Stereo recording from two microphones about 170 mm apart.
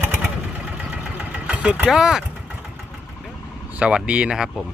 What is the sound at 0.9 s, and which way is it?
Vehicle, 5° right (ahead or behind).